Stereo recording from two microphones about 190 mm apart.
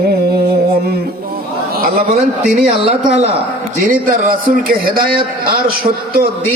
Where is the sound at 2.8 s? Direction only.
30° right (ahead or behind).